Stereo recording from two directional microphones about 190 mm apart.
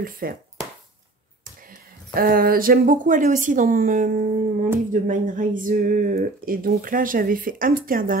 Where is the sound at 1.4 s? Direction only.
45° right (ahead or behind).